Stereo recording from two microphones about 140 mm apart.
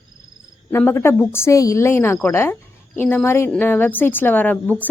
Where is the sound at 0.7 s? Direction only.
15° left (ahead or behind).